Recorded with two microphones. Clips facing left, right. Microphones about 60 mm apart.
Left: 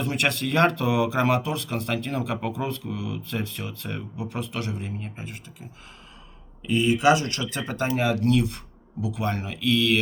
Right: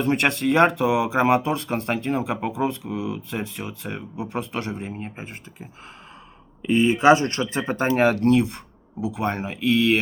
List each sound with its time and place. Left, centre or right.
0.0 s speech: right
7.9 s speech: right
8.3 s speech: right